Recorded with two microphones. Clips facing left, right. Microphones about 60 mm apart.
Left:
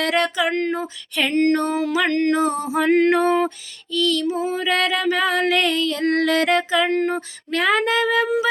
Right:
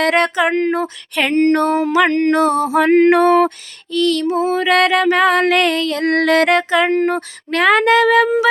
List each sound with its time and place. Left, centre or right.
0.0 s a sound: right
0.7 s child singing: right
1.5 s mantra: right
2.0 s music: right
2.3 s speech: right
3.1 s mantra: right
3.9 s mantra: right
7.1 s speech: right